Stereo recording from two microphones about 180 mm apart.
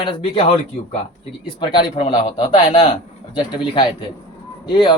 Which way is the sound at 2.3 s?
40° left (ahead or behind).